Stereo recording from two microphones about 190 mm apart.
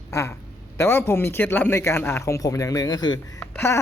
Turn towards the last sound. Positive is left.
turn(degrees=10)  # may be behind; listen again after turning